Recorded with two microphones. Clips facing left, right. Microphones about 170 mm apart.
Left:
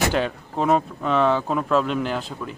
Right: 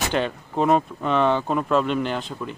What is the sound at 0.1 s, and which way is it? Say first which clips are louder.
Speech: even; centre (ahead or behind).